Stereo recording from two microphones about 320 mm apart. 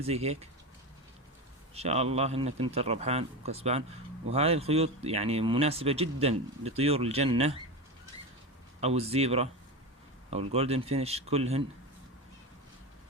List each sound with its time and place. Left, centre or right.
0.0 s a man's voice: centre
1.7 s a man's voice: centre
8.8 s a man's voice: centre